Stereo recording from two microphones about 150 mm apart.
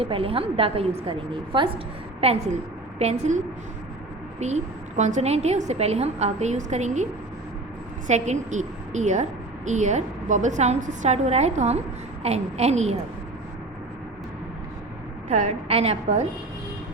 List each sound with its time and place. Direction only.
0.0 s a woman's voice: 40° right (ahead or behind)
2.2 s a woman's voice: 45° right (ahead or behind)
15.3 s a woman's voice: 50° right (ahead or behind)